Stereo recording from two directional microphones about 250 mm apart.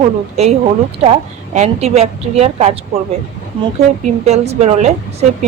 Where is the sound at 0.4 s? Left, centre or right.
Right.